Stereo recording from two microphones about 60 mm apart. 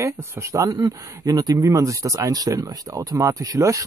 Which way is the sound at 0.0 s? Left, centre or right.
Right.